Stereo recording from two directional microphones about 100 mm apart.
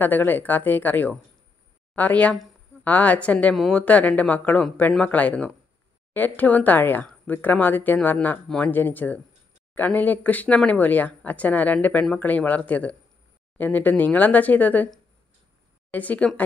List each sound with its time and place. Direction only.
0.0 s speech: 20° left (ahead or behind)
3.5 s a woman's voice: centre (ahead or behind)
3.8 s speech: 15° left (ahead or behind)
15.9 s speech: 15° left (ahead or behind)